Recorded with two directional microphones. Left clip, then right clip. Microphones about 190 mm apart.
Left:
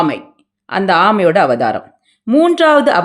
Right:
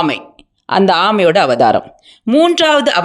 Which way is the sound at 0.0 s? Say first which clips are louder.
Even; 35° right (ahead or behind).